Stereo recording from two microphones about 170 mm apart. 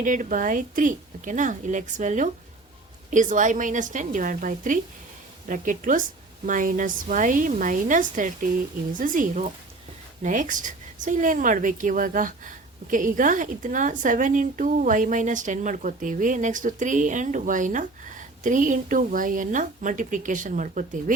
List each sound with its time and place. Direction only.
0.0 s a woman's voice: 50° right (ahead or behind)